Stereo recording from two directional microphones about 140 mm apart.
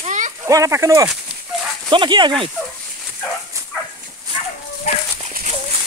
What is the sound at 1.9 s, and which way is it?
Speech, 35° right (ahead or behind).